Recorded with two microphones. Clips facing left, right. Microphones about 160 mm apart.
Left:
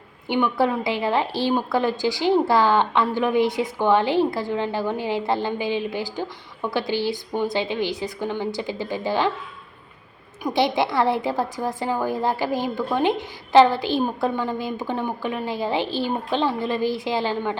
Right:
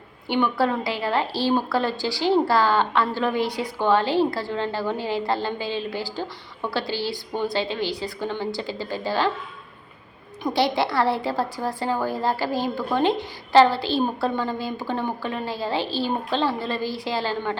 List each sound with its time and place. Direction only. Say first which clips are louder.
0.3 s a woman's voice: left 1 dB; 15° left (ahead or behind)
10.4 s a woman's voice: left 1 dB; 20° left (ahead or behind)